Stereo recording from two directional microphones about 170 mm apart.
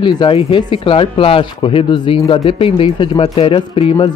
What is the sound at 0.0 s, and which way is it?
Speech, 25° left (ahead or behind).